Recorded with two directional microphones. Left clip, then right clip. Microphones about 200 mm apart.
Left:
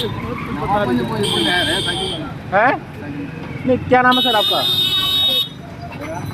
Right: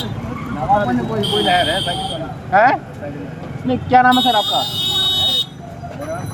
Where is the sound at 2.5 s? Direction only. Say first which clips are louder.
Right 2 dB; 20° left (ahead or behind).